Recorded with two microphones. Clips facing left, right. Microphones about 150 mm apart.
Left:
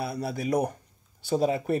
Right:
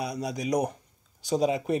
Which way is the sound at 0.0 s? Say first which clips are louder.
Left 1 dB; 15° right (ahead or behind).